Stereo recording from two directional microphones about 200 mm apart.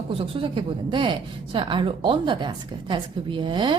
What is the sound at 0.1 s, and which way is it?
A woman's voice, 25° right (ahead or behind).